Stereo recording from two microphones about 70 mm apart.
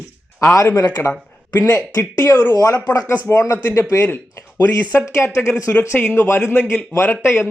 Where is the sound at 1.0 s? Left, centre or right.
Left.